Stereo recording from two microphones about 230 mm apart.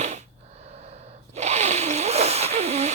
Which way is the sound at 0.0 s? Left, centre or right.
Right.